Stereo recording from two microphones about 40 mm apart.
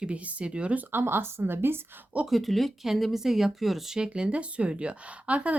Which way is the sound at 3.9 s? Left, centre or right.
Right.